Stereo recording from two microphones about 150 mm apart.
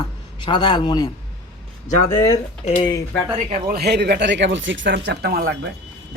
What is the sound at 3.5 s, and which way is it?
Speech, 75° right (ahead or behind).